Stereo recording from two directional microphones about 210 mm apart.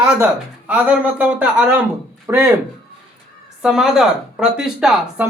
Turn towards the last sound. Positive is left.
turn(degrees=-5)  # may be behind; listen again after turning